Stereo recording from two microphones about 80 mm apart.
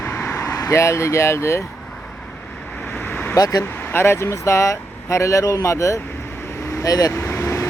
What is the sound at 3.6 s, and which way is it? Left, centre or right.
Speech, left.